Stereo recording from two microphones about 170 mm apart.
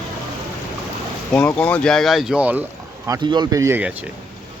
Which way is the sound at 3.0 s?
20° right (ahead or behind).